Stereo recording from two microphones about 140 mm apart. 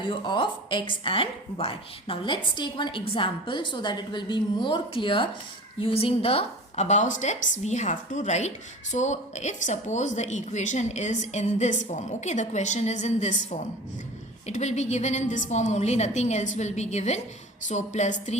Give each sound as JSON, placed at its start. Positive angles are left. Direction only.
{"t": 0.1, "sound": "a woman's voice", "side_deg": 35}